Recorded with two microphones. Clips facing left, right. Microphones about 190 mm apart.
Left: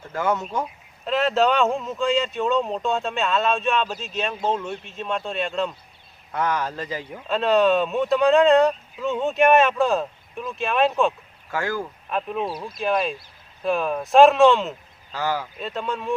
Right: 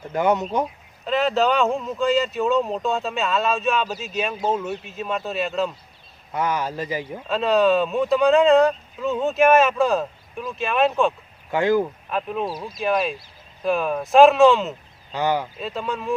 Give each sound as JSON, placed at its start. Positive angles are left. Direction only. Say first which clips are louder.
{"t": 0.1, "sound": "speech", "louder": "right 4 dB", "side_deg": -20}
{"t": 1.0, "sound": "a man's voice", "louder": "even", "side_deg": 0}
{"t": 7.3, "sound": "speech", "louder": "even", "side_deg": 0}
{"t": 11.5, "sound": "speech", "louder": "right 7 dB", "side_deg": -20}
{"t": 12.0, "sound": "speech", "louder": "right 1 dB", "side_deg": 0}
{"t": 15.1, "sound": "speech", "louder": "right 4 dB", "side_deg": -20}
{"t": 15.5, "sound": "speech", "louder": "right 1 dB", "side_deg": 0}